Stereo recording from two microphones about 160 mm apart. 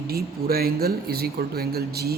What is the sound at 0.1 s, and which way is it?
Speech, 70° right (ahead or behind).